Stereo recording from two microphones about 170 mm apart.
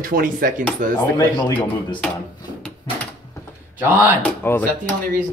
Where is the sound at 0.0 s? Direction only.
55° right (ahead or behind).